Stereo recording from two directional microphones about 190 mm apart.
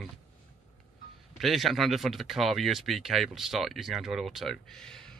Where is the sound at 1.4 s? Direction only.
Centre (ahead or behind).